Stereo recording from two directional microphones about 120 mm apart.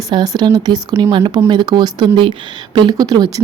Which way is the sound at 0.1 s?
35° right (ahead or behind).